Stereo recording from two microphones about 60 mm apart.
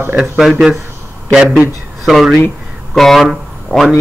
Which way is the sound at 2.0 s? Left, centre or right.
Centre.